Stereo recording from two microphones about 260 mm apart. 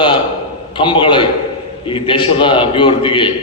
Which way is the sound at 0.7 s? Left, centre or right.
Centre.